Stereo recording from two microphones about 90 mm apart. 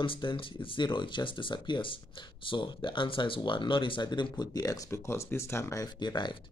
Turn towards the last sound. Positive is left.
turn(degrees=55)  # may be behind; listen again after turning